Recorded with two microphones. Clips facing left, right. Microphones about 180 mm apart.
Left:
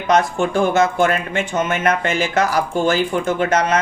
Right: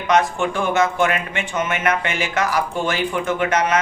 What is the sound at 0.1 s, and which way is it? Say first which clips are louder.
Speech: left 2 dB; 40° left (ahead or behind).